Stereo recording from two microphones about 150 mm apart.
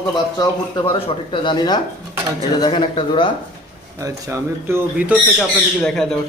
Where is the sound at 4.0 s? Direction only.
15° right (ahead or behind).